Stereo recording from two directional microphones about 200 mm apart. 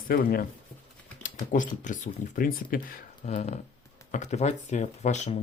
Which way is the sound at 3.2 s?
35° left (ahead or behind).